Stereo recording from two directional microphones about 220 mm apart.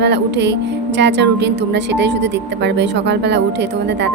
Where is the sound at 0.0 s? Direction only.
50° right (ahead or behind).